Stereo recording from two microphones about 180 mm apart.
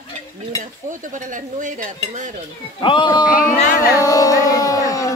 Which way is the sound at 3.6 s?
45° left (ahead or behind).